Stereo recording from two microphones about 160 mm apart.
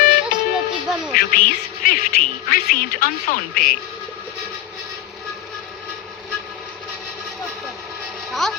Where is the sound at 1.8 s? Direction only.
60° left (ahead or behind).